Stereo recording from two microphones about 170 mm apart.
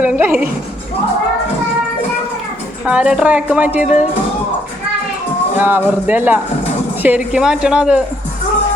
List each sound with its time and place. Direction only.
0.0 s a woman's voice: 10° right (ahead or behind)
2.8 s a woman's voice: 5° right (ahead or behind)
5.5 s a woman's voice: 10° right (ahead or behind)